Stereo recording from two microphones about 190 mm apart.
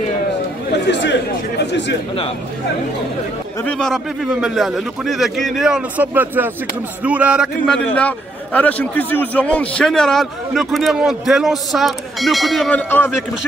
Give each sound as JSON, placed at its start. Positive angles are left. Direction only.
{"t": 0.8, "sound": "speech", "side_deg": 65}
{"t": 3.6, "sound": "a man's voice", "side_deg": 5}